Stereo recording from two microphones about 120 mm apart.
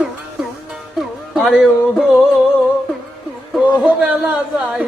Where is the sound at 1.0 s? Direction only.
5° right (ahead or behind).